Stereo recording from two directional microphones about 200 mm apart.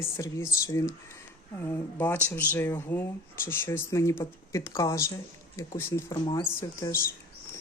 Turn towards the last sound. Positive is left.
turn(degrees=15)  # may be behind; listen again after turning